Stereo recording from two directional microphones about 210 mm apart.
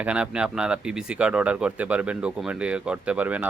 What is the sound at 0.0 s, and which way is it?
Speech, 5° right (ahead or behind).